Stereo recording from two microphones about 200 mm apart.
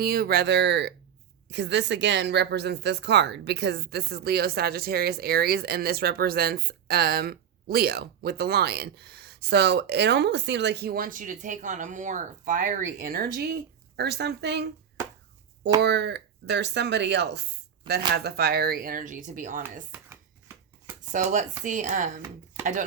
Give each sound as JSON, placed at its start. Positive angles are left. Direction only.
{"t": 0.0, "sound": "a woman's voice", "side_deg": -50}
{"t": 15.8, "sound": "a woman's voice", "side_deg": -60}
{"t": 21.1, "sound": "speech", "side_deg": -40}